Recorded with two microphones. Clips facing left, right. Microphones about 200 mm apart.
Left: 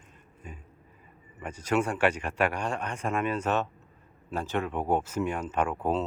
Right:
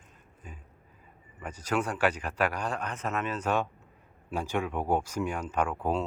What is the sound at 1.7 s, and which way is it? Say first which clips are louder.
Speech: left 3 dB; 10° left (ahead or behind).